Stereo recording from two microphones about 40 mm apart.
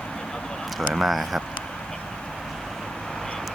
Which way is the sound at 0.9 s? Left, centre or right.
Centre.